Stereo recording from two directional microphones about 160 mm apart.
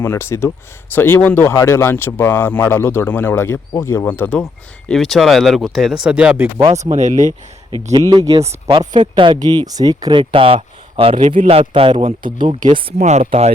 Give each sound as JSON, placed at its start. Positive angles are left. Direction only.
{"t": 0.0, "sound": "speech", "side_deg": 15}
{"t": 6.7, "sound": "speech", "side_deg": -35}
{"t": 7.9, "sound": "speech", "side_deg": -25}
{"t": 13.0, "sound": "speech", "side_deg": -45}